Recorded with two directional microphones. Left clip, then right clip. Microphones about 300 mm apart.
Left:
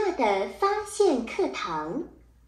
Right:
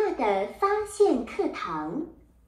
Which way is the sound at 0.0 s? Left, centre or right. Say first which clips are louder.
Even; centre.